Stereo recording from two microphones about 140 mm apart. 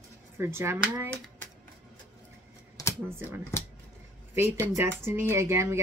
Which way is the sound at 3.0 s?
15° right (ahead or behind).